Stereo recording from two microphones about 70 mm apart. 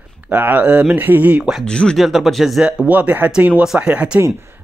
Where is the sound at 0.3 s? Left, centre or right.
Right.